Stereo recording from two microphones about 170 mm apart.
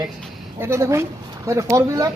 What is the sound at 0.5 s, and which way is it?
A man's voice, 15° right (ahead or behind).